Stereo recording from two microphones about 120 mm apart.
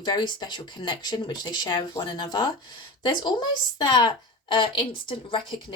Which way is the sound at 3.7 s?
40° left (ahead or behind).